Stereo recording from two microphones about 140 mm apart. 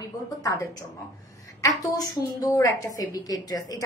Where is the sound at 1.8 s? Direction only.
25° left (ahead or behind).